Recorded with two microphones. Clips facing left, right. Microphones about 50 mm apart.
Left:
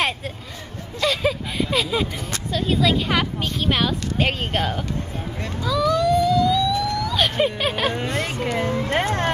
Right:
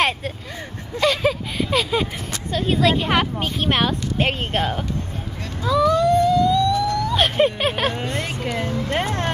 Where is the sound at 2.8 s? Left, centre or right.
Right.